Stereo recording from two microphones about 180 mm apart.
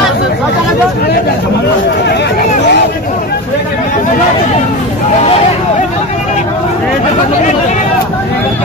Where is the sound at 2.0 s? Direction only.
70° left (ahead or behind).